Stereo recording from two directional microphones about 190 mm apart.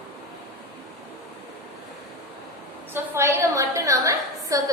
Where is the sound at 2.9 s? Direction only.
15° right (ahead or behind).